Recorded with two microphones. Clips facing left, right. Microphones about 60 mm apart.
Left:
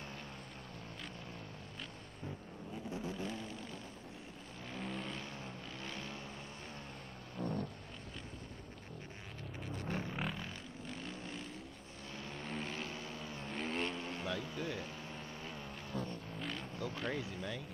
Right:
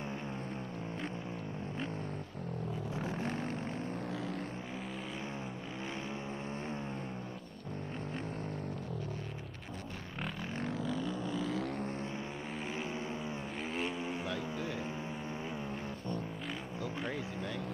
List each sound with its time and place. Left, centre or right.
4.7 s vehicle: centre
12.5 s vehicle: centre
13.6 s vehicle: centre
14.2 s vehicle: centre
16.4 s vehicle: centre